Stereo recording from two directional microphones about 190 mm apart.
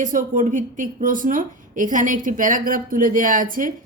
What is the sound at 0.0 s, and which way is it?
A woman's voice, 45° right (ahead or behind).